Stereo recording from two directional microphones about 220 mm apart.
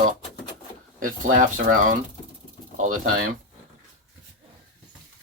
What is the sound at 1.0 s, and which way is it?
Speech, 35° right (ahead or behind).